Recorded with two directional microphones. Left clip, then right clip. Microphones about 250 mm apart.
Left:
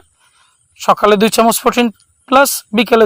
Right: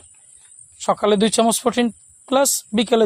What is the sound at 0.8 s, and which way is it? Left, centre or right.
Speech, left.